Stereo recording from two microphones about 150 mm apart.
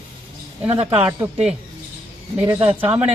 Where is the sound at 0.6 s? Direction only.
40° right (ahead or behind).